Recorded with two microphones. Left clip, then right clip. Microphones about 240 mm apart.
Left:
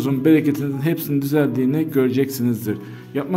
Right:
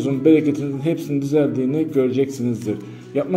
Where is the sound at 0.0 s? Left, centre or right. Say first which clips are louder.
Right 1 dB; left.